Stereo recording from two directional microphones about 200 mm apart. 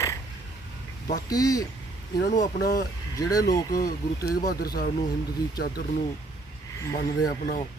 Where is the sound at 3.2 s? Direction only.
15° left (ahead or behind).